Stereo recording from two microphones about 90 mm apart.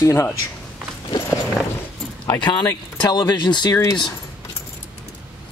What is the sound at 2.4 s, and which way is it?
Speech, 55° left (ahead or behind).